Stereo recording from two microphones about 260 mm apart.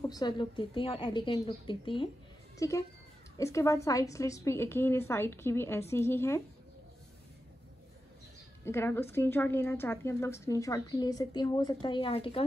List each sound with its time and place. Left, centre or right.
0.0 s a woman's voice: centre
8.6 s a woman's voice: centre